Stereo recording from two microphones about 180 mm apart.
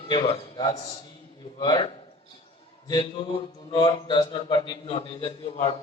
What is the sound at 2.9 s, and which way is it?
A man's voice, 25° left (ahead or behind).